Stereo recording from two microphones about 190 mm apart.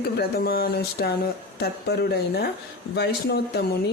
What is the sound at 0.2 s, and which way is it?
Speech, 55° left (ahead or behind).